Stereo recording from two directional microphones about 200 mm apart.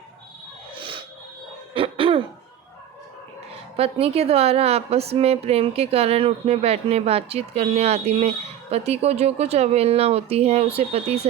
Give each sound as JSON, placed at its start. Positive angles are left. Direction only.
{"t": 0.8, "sound": "a sound", "side_deg": -25}
{"t": 1.7, "sound": "throat clearing", "side_deg": -25}
{"t": 3.5, "sound": "a woman's voice", "side_deg": -30}